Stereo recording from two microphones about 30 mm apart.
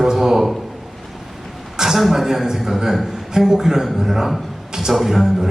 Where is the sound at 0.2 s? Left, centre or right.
Centre.